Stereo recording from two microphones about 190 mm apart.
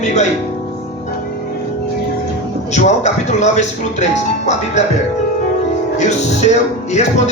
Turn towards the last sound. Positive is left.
turn(degrees=35)  # may be behind; listen again after turning